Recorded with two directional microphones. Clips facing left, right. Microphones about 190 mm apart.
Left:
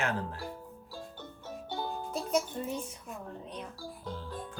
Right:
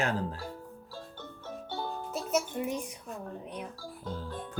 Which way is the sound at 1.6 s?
15° left (ahead or behind).